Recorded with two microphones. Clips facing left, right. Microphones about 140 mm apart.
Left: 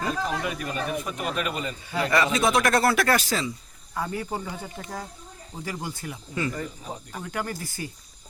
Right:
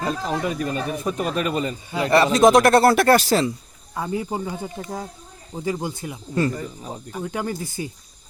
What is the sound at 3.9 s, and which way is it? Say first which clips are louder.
Speech: right 4 dB; 20° right (ahead or behind).